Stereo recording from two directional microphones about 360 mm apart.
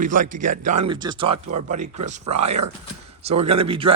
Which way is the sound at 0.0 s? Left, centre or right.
Right.